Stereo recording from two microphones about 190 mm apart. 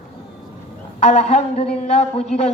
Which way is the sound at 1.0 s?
35° left (ahead or behind).